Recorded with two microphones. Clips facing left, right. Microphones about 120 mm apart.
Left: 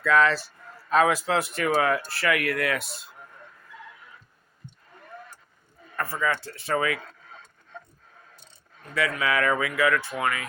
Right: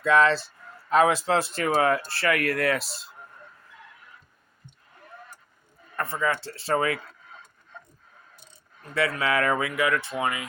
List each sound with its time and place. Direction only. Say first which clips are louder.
0.0 s a man's voice: right 1 dB; 25° right (ahead or behind)
6.0 s a man's voice: even; 25° right (ahead or behind)
9.0 s a man's voice: right 1 dB; 30° right (ahead or behind)